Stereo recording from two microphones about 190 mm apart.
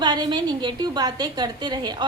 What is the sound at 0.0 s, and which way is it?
A woman's voice, 20° right (ahead or behind).